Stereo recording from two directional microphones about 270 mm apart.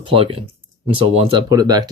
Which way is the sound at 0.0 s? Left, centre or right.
Centre.